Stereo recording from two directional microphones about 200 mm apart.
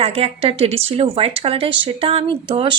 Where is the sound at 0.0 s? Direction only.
30° right (ahead or behind).